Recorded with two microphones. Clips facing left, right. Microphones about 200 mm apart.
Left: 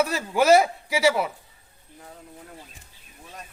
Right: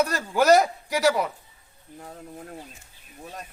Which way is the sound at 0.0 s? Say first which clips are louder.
Even; 5° left (ahead or behind).